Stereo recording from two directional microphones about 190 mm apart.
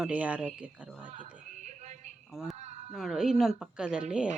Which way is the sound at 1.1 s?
40° right (ahead or behind).